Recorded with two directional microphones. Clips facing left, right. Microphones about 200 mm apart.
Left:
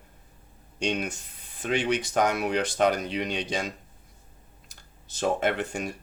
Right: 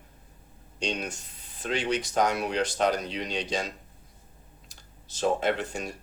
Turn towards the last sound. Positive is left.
turn(degrees=55)  # may be behind; listen again after turning